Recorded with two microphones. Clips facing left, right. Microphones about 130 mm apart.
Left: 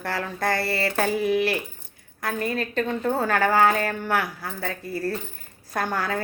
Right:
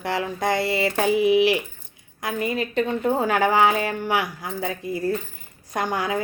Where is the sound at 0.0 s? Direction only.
15° right (ahead or behind).